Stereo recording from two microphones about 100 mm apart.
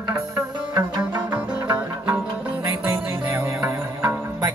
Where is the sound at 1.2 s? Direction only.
15° right (ahead or behind).